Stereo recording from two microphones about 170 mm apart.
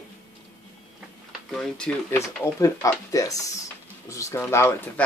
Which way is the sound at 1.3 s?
Centre (ahead or behind).